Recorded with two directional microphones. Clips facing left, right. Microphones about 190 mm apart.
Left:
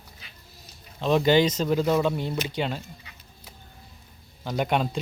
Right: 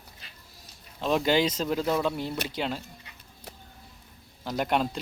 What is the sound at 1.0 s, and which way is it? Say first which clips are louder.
Speech: left 4 dB; 5° right (ahead or behind).